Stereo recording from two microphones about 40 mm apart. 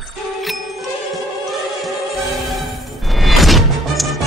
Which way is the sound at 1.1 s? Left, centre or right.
Centre.